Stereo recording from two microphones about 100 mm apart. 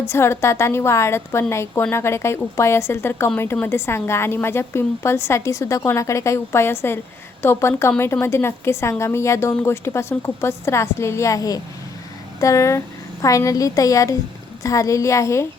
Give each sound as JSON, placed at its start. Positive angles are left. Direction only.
{"t": 0.0, "sound": "a woman's voice", "side_deg": 25}